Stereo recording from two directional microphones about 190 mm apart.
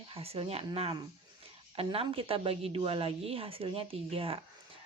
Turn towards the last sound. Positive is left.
turn(degrees=-30)  # may be behind; listen again after turning